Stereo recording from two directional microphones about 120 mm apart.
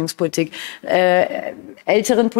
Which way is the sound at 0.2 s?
15° left (ahead or behind).